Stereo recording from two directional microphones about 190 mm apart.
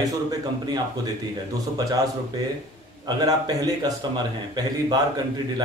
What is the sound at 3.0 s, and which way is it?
Speech, 20° right (ahead or behind).